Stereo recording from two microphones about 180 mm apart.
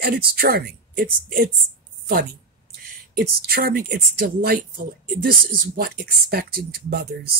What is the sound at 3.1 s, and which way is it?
Speech, 60° right (ahead or behind).